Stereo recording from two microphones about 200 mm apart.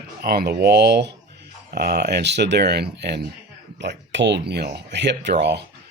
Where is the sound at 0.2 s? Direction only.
50° right (ahead or behind).